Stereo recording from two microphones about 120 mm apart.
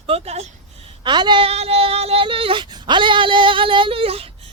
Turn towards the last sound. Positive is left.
turn(degrees=-50)  # may be behind; listen again after turning